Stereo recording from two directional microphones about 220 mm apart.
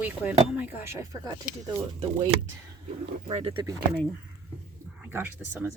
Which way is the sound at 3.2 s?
25° right (ahead or behind).